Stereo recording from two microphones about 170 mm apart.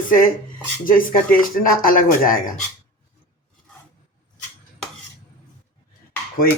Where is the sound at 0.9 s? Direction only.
55° left (ahead or behind).